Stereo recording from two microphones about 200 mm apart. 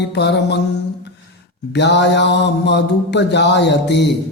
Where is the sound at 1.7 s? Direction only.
60° left (ahead or behind).